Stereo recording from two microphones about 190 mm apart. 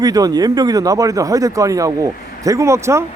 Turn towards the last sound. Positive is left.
turn(degrees=-15)  # may be behind; listen again after turning